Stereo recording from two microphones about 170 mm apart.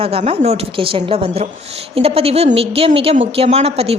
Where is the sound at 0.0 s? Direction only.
35° right (ahead or behind).